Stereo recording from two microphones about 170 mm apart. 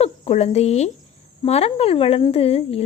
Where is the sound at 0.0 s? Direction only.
35° left (ahead or behind).